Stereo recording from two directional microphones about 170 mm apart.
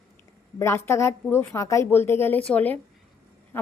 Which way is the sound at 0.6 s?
15° left (ahead or behind).